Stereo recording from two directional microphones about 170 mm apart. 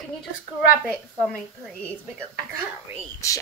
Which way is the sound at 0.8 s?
Centre (ahead or behind).